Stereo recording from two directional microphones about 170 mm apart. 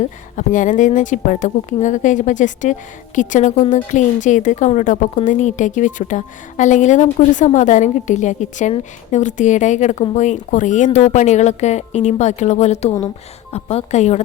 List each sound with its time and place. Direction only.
0.3 s a woman's voice: 50° left (ahead or behind)